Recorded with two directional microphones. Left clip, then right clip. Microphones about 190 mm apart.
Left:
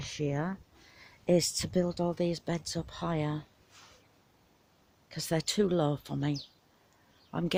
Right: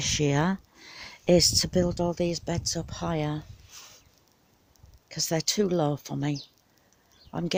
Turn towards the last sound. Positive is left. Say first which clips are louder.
# right 2 dB
turn(degrees=-10)  # may be behind; listen again after turning